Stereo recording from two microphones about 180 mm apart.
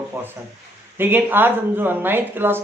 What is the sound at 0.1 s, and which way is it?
Speech, 15° right (ahead or behind).